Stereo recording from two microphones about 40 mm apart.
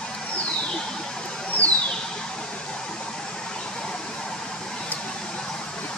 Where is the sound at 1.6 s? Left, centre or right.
Left.